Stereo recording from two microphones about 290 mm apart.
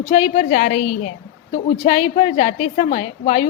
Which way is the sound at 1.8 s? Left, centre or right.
Left.